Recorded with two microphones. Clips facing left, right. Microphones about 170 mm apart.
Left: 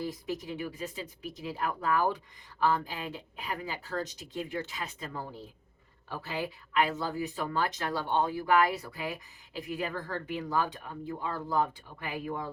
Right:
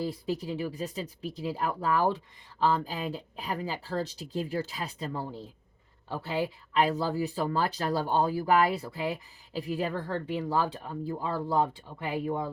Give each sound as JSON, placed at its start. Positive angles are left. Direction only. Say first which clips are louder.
{"t": 0.0, "sound": "speech", "louder": "right 3 dB", "side_deg": -30}